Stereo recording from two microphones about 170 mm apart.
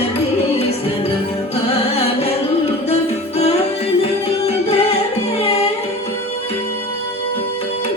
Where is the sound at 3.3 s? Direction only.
40° left (ahead or behind).